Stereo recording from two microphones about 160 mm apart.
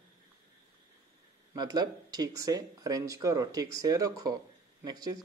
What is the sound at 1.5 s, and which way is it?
Speech, 25° right (ahead or behind).